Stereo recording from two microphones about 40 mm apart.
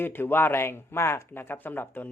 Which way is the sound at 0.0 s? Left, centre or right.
Left.